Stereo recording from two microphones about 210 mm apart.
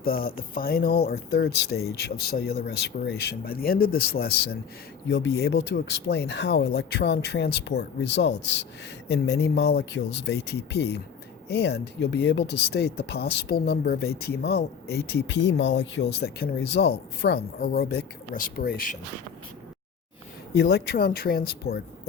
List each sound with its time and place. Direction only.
0.0 s speech: 45° left (ahead or behind)
5.0 s speech: 60° left (ahead or behind); by 18.9 s 45° left (ahead or behind)
20.5 s speech: 50° left (ahead or behind)